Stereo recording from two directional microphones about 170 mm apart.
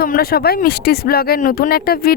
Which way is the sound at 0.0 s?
60° left (ahead or behind).